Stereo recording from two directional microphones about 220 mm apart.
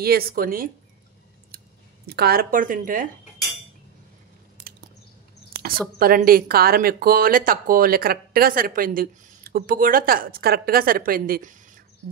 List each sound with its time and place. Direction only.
0.0 s a woman's voice: 45° right (ahead or behind)
1.5 s clicking: 45° right (ahead or behind)
2.0 s a woman's voice: 45° right (ahead or behind)
5.5 s a woman's voice: 40° right (ahead or behind)